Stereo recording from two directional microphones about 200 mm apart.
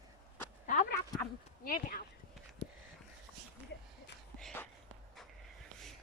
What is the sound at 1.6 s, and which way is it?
Speech, 45° left (ahead or behind).